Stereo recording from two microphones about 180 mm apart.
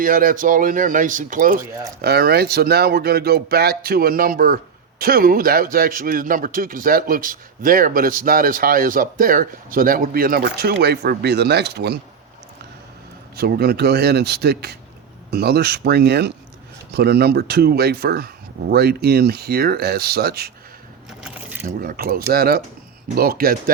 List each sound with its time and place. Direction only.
0.0 s speech: 50° right (ahead or behind)
2.0 s speech: 60° right (ahead or behind)
13.3 s speech: 60° right (ahead or behind)
21.8 s speech: 55° right (ahead or behind)